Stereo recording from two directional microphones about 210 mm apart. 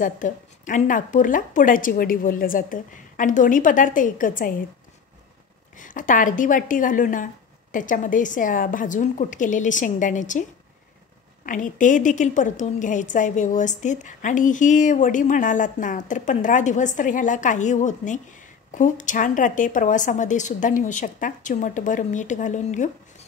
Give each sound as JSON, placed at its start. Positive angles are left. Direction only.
{"t": 0.0, "sound": "a woman's voice", "side_deg": 35}
{"t": 5.8, "sound": "a woman's voice", "side_deg": 40}
{"t": 11.4, "sound": "a woman's voice", "side_deg": 40}